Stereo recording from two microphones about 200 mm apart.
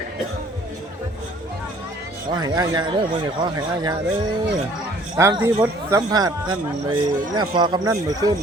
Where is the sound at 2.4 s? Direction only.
20° right (ahead or behind).